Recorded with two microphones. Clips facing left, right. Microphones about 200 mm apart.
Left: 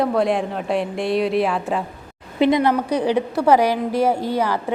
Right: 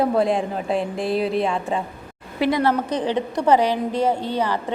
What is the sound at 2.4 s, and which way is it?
A woman's voice, 20° left (ahead or behind).